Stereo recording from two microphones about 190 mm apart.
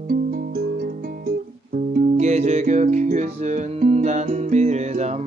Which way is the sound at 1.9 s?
45° right (ahead or behind).